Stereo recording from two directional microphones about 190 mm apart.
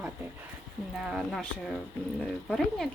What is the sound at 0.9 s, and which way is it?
Speech, 5° right (ahead or behind).